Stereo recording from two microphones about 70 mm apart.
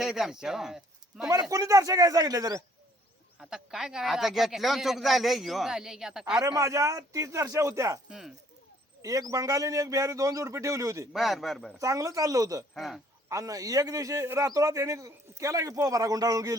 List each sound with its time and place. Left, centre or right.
0.0 s speech: centre
1.5 s speech: right
3.4 s a man's voice: centre
6.4 s a man's voice: right
9.0 s a man's voice: right
11.1 s a man's voice: centre
11.8 s a man's voice: right
12.7 s a man's voice: centre
13.2 s a man's voice: right